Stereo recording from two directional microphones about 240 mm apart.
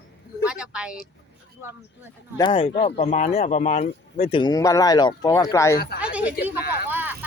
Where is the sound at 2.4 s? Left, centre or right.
Left.